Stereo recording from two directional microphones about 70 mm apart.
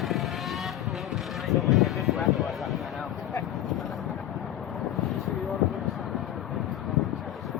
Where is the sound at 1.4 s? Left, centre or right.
Centre.